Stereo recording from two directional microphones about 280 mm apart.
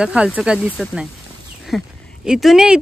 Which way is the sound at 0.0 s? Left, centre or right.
Centre.